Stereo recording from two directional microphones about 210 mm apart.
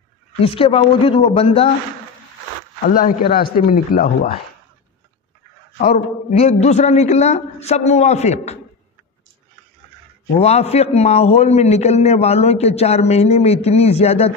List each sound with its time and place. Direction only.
0.4 s a man's voice: 25° left (ahead or behind)
2.9 s speech: 45° left (ahead or behind)
6.3 s a man's voice: 30° left (ahead or behind)
10.3 s a man's voice: 30° left (ahead or behind)